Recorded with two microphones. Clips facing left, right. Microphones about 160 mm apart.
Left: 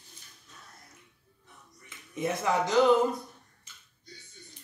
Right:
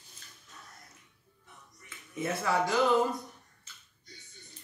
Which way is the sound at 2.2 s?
20° left (ahead or behind).